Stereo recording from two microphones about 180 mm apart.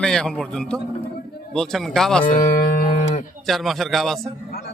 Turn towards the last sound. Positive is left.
turn(degrees=0)  # may be behind; listen again after turning